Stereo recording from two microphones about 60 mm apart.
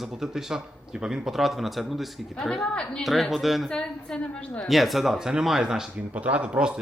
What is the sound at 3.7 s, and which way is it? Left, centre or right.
Speech, centre.